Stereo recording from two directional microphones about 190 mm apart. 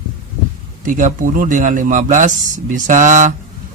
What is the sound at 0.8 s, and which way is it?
A man's voice, 40° right (ahead or behind).